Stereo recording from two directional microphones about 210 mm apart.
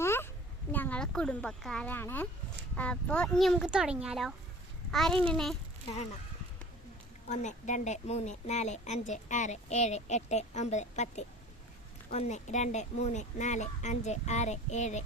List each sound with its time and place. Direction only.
0.0 s a sound: 10° left (ahead or behind)
0.7 s speech: 10° left (ahead or behind)
7.3 s speech: 35° left (ahead or behind)